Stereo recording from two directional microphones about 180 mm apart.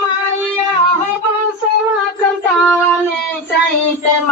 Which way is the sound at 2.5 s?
5° left (ahead or behind).